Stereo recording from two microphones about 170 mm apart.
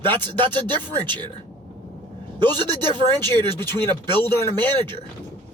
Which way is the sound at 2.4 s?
25° right (ahead or behind).